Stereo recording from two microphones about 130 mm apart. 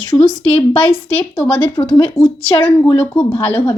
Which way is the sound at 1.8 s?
35° left (ahead or behind).